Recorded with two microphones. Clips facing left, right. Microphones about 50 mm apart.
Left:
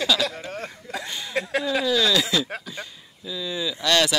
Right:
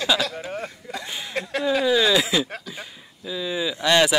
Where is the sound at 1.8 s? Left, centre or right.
Centre.